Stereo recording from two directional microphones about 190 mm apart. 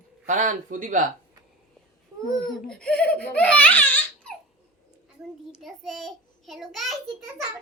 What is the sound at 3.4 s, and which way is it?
Speech, 5° left (ahead or behind).